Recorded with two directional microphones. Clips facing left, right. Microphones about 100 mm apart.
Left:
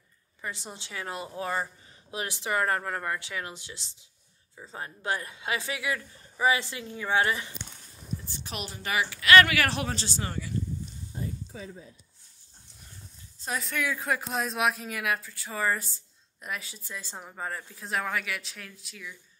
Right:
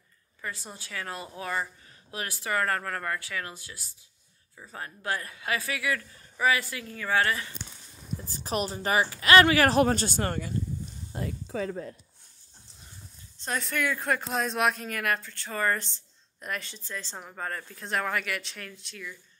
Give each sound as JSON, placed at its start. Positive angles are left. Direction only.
{"t": 0.4, "sound": "a woman's voice", "side_deg": 20}
{"t": 8.3, "sound": "a woman's voice", "side_deg": -40}
{"t": 11.1, "sound": "speech", "side_deg": -85}
{"t": 13.4, "sound": "speech", "side_deg": 5}